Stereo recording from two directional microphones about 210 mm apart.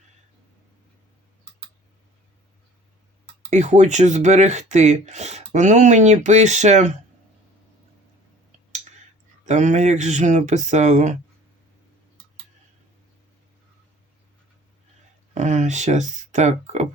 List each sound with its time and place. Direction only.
3.5 s speech: 35° right (ahead or behind)
9.5 s speech: 35° right (ahead or behind)
15.4 s speech: 35° right (ahead or behind)